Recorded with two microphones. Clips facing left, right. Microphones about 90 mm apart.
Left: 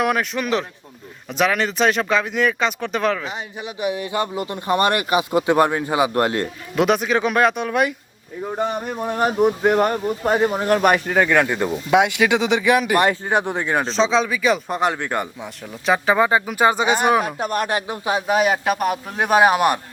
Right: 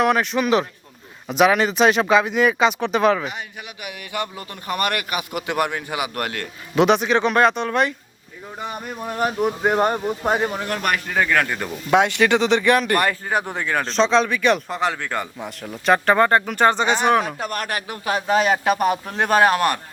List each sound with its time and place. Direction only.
0.0 s speech: centre (ahead or behind)
3.8 s a man's voice: 30° left (ahead or behind)
6.7 s speech: centre (ahead or behind)
8.4 s a man's voice: 35° left (ahead or behind)
10.0 s speech: 5° right (ahead or behind)
10.6 s speech: 35° left (ahead or behind)
10.9 s speech: 10° left (ahead or behind)
13.0 s a man's voice: 20° left (ahead or behind)
13.8 s speech: centre (ahead or behind)
14.7 s speech: 15° left (ahead or behind)
15.4 s speech: centre (ahead or behind); by 19.8 s 15° left (ahead or behind)